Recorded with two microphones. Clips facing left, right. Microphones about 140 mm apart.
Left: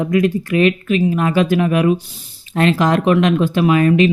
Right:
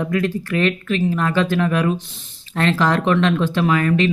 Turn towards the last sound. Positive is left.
turn(degrees=15)  # may be behind; listen again after turning